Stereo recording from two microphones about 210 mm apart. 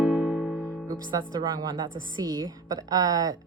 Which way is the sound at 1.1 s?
20° right (ahead or behind).